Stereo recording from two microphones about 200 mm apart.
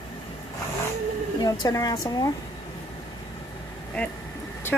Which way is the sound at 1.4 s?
20° left (ahead or behind).